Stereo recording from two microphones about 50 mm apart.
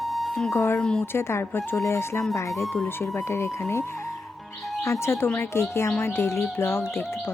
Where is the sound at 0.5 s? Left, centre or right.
Left.